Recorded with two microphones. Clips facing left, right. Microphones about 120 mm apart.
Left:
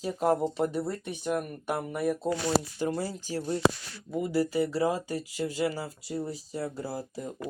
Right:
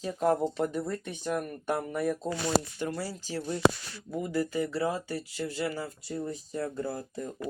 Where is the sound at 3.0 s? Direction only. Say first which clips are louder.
Left 2 dB; 50° left (ahead or behind).